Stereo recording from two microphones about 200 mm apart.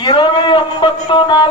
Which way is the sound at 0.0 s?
25° left (ahead or behind).